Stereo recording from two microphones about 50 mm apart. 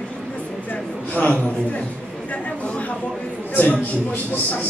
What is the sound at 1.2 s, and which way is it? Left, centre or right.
Speech, left.